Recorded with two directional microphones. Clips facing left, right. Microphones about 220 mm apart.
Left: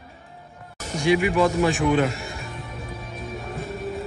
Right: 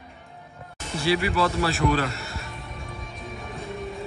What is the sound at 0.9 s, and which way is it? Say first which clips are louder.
Speech: left 4 dB; 15° left (ahead or behind).